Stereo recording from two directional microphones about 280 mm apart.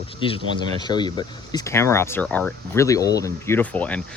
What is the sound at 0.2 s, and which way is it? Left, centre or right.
Speech, centre.